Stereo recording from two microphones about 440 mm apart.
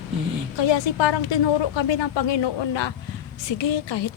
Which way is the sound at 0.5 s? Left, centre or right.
Left.